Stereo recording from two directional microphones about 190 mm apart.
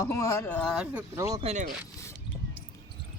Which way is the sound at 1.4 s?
35° right (ahead or behind).